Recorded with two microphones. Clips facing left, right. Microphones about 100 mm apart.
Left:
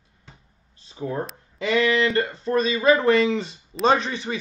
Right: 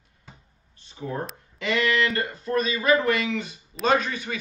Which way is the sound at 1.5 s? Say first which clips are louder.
Left 3 dB; 30° left (ahead or behind).